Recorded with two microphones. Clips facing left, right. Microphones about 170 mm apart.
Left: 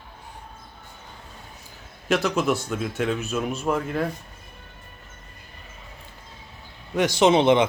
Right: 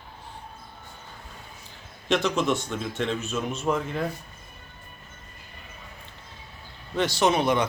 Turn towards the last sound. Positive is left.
turn(degrees=25)  # may be behind; listen again after turning